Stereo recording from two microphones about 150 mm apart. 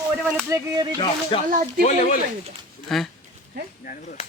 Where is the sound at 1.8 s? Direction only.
50° left (ahead or behind).